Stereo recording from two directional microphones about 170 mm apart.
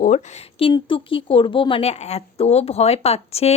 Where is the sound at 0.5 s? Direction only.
30° left (ahead or behind).